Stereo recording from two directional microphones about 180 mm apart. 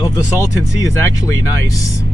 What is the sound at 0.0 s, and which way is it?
Speech, 15° left (ahead or behind).